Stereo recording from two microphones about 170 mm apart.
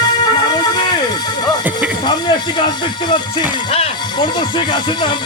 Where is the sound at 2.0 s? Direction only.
25° left (ahead or behind).